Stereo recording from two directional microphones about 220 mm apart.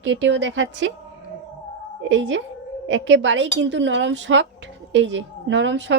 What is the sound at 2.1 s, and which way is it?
A woman's voice, 55° right (ahead or behind).